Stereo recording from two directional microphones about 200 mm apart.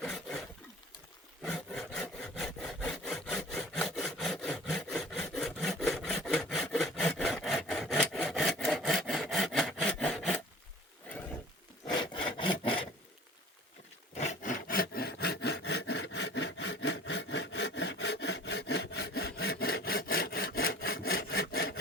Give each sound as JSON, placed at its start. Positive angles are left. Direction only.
{"t": 0.0, "sound": "a sound", "side_deg": 0}
{"t": 1.5, "sound": "sawing", "side_deg": 5}
{"t": 11.9, "sound": "sawing", "side_deg": 20}
{"t": 14.2, "sound": "wood", "side_deg": 35}